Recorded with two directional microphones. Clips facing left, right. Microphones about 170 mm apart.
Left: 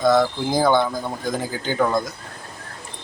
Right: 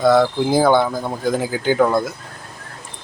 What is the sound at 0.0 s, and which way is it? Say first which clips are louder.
Speech: right 3 dB; 5° right (ahead or behind).